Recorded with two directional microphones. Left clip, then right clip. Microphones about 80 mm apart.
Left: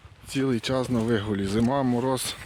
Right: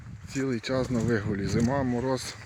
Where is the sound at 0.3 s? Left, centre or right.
Left.